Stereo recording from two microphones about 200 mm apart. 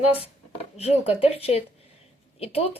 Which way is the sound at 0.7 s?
30° left (ahead or behind).